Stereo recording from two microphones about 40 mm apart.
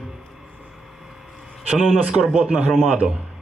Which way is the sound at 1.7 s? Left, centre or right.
Centre.